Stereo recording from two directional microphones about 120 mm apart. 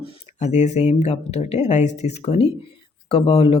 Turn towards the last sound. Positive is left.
turn(degrees=55)  # may be behind; listen again after turning